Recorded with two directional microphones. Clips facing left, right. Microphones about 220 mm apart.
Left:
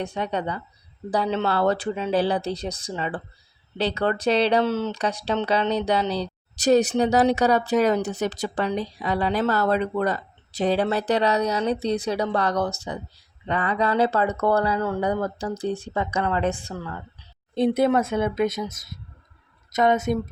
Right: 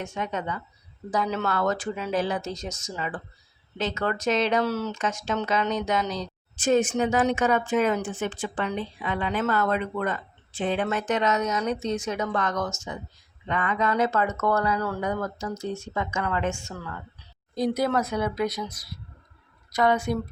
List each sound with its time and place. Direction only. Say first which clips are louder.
0.0 s speech: left 4 dB; 35° left (ahead or behind)
19.7 s speech: left 3 dB; 20° left (ahead or behind)